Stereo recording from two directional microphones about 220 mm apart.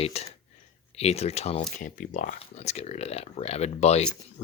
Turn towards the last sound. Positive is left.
turn(degrees=30)  # may be behind; listen again after turning